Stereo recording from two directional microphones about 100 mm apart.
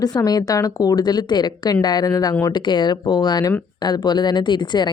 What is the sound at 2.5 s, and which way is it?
A woman's voice, 50° left (ahead or behind).